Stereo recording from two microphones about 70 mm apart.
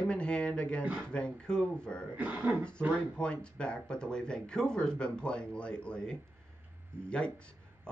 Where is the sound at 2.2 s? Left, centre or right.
Right.